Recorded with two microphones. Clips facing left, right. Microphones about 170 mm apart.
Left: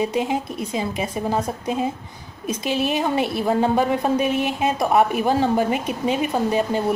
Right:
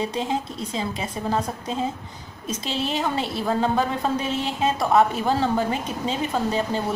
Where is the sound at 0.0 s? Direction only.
15° left (ahead or behind).